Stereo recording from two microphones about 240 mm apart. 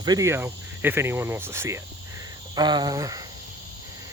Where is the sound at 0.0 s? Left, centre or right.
Centre.